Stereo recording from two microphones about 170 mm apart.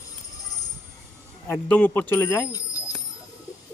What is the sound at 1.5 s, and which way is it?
Speech, 10° left (ahead or behind).